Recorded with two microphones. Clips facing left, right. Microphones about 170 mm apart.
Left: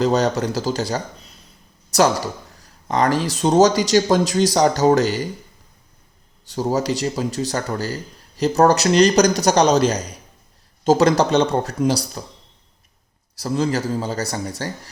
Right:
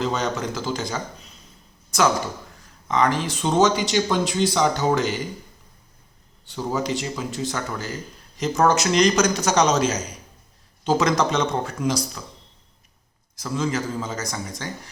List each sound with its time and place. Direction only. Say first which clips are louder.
0.0 s a man's voice: left 7 dB; 40° left (ahead or behind)
6.5 s a man's voice: left 4 dB; 40° left (ahead or behind)
13.3 s a man's voice: left 4 dB; 35° left (ahead or behind)